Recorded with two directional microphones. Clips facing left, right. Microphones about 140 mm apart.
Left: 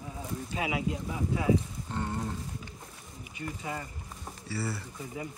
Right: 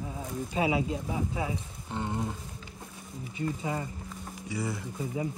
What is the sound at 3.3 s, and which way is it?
Speech, 25° right (ahead or behind).